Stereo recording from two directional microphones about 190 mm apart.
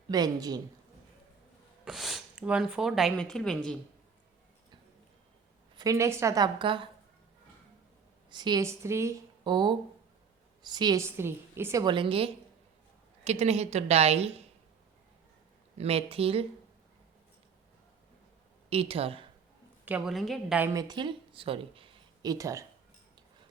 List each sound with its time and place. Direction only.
0.1 s a woman's voice: 20° right (ahead or behind)
1.8 s speech: centre (ahead or behind)
5.7 s a woman's voice: 15° right (ahead or behind)
8.3 s a woman's voice: 20° right (ahead or behind)
15.8 s a woman's voice: 30° right (ahead or behind)
18.7 s a woman's voice: 30° right (ahead or behind)
19.8 s a woman's voice: 5° right (ahead or behind)
20.6 s a woman's voice: 20° right (ahead or behind)